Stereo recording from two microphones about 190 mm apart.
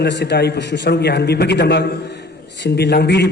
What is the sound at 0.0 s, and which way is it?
A man's voice, 60° left (ahead or behind).